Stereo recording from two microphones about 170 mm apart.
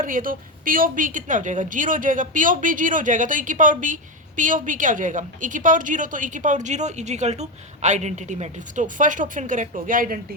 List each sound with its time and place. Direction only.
0.0 s a woman's voice: 55° right (ahead or behind)